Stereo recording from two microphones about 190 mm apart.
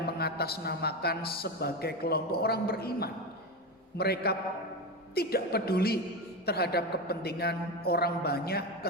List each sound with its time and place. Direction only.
0.2 s speech: 55° left (ahead or behind)